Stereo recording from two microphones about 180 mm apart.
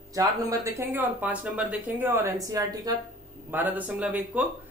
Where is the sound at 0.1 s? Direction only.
20° right (ahead or behind).